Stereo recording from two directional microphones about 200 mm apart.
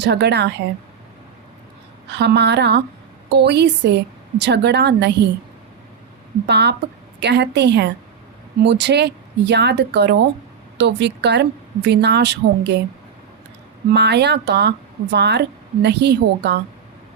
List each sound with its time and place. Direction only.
0.0 s a woman's voice: 55° right (ahead or behind)
2.0 s a woman's voice: 60° right (ahead or behind)
6.5 s a woman's voice: 55° right (ahead or behind)
13.9 s a woman's voice: 55° right (ahead or behind)